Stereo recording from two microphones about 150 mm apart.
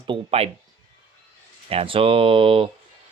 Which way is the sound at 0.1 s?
40° right (ahead or behind).